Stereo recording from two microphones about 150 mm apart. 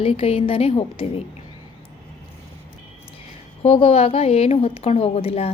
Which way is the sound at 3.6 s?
40° left (ahead or behind).